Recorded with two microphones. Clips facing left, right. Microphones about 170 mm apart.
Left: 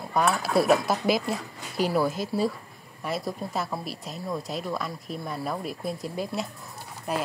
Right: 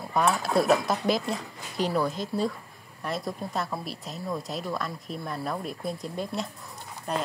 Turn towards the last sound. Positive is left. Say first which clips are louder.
# left 1 dB
turn(degrees=5)  # may be behind; listen again after turning